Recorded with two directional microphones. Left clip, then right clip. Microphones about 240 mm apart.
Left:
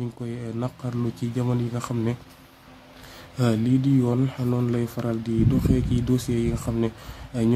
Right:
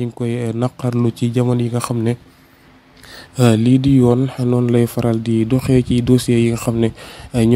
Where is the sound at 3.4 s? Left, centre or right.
Right.